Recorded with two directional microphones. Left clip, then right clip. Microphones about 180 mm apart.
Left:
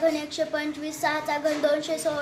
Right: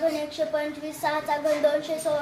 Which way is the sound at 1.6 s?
35° left (ahead or behind).